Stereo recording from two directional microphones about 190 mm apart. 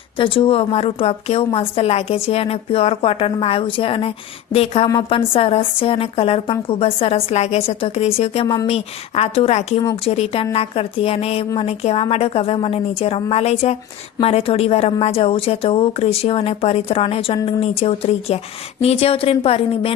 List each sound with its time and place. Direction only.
0.2 s a woman's voice: 30° left (ahead or behind)